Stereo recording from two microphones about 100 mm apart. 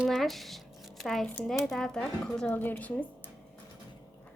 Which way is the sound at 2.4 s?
20° left (ahead or behind).